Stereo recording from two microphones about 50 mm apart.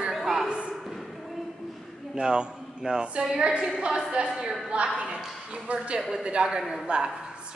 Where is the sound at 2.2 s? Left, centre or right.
Centre.